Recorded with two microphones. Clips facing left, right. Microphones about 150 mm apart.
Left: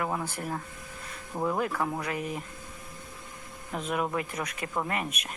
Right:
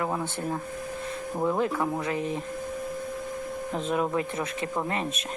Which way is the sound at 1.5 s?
25° right (ahead or behind).